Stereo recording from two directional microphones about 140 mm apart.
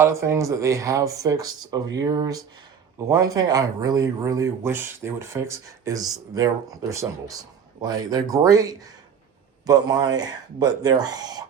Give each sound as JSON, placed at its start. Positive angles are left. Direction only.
{"t": 0.0, "sound": "speech", "side_deg": -20}